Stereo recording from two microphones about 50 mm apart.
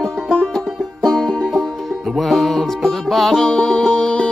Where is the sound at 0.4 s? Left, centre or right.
Centre.